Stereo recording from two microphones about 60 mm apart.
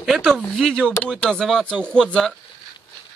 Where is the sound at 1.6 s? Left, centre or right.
Centre.